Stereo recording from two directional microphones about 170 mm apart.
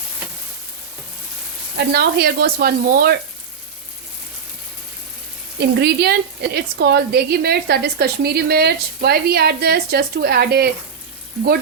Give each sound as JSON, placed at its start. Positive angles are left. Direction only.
{"t": 1.7, "sound": "speech", "side_deg": -70}
{"t": 5.5, "sound": "a woman's voice", "side_deg": -75}